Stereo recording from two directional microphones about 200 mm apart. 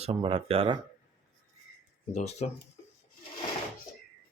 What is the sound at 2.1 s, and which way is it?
Speech, 35° left (ahead or behind).